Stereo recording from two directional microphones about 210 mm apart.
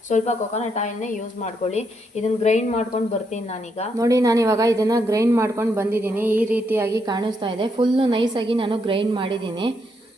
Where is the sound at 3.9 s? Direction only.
15° right (ahead or behind).